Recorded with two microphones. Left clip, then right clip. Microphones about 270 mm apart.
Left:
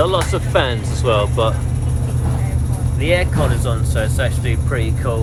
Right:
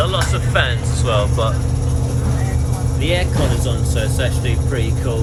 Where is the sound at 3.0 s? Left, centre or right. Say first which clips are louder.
Left 3 dB; centre.